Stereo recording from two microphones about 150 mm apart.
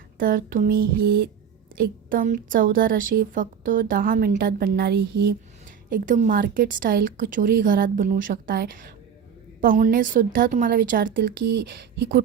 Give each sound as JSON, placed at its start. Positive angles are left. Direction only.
{"t": 0.2, "sound": "a woman's voice", "side_deg": -70}
{"t": 1.8, "sound": "a woman's voice", "side_deg": -65}
{"t": 5.9, "sound": "a woman's voice", "side_deg": -60}
{"t": 6.4, "sound": "a woman's voice", "side_deg": -75}
{"t": 9.6, "sound": "a woman's voice", "side_deg": -65}